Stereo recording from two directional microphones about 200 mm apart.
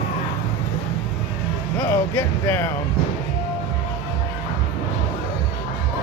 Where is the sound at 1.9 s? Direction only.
10° left (ahead or behind).